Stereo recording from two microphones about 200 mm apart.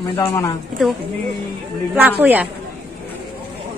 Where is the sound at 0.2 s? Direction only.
15° left (ahead or behind).